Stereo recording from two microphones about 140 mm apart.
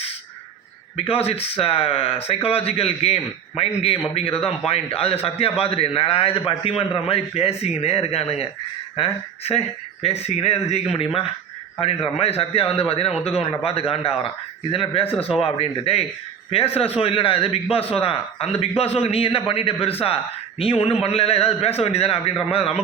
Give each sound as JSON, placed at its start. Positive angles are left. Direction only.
{"t": 0.9, "sound": "a man's voice", "side_deg": 45}